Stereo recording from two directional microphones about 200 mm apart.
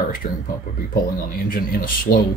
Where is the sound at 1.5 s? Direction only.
45° left (ahead or behind).